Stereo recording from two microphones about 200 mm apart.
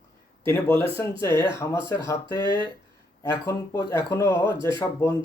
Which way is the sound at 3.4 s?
15° left (ahead or behind).